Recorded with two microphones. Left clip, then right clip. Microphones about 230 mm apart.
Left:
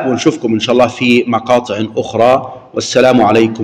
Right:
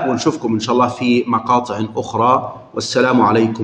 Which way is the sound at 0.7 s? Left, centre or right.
Centre.